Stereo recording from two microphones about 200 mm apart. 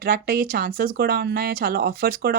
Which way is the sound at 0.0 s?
45° right (ahead or behind).